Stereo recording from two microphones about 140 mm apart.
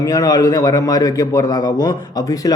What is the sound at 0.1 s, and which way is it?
Speech, 25° left (ahead or behind).